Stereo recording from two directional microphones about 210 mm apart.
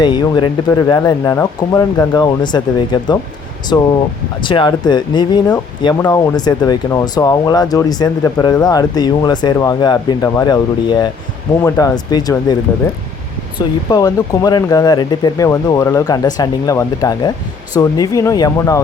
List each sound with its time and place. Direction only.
0.0 s speech: 20° left (ahead or behind)
13.6 s speech: 20° left (ahead or behind)